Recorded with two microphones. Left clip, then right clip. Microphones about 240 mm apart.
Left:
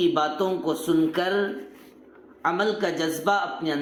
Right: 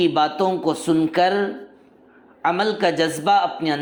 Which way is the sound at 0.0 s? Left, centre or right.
Right.